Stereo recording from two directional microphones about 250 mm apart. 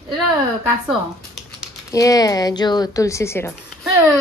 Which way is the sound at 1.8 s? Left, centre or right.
Centre.